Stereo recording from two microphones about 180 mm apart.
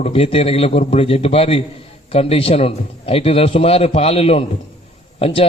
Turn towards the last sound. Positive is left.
turn(degrees=30)  # may be behind; listen again after turning